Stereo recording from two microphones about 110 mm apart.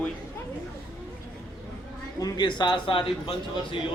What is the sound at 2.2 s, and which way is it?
Speech, 35° left (ahead or behind).